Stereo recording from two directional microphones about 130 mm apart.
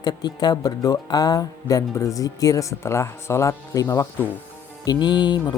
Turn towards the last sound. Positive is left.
turn(degrees=35)  # may be behind; listen again after turning